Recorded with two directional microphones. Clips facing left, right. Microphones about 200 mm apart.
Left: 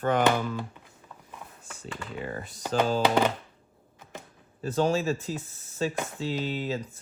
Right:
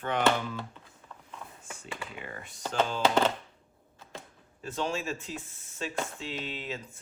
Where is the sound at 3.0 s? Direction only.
15° left (ahead or behind).